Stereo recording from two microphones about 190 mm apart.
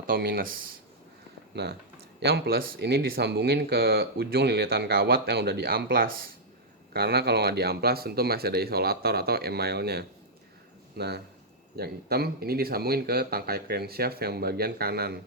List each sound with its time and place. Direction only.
0.1 s speech: 50° right (ahead or behind)
1.5 s speech: 60° right (ahead or behind)